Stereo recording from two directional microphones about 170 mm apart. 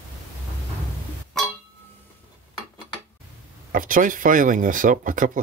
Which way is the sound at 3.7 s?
55° right (ahead or behind).